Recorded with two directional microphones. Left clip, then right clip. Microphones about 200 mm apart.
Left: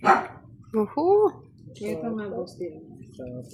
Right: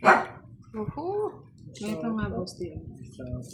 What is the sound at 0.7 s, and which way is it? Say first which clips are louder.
Speech: left 11 dB; 50° left (ahead or behind).